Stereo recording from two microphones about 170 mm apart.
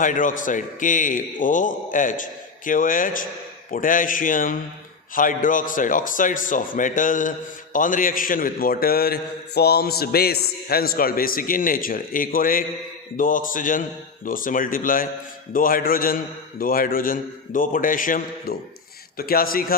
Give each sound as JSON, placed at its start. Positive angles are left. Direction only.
{"t": 0.0, "sound": "a man's voice", "side_deg": 50}